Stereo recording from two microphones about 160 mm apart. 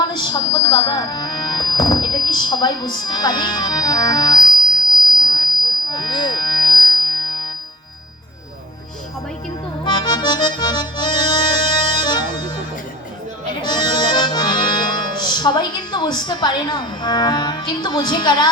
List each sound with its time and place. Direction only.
0.0 s speech: 30° left (ahead or behind)
5.2 s music: 25° left (ahead or behind)
9.8 s accordion: 25° left (ahead or behind)
13.6 s accordion: 30° left (ahead or behind)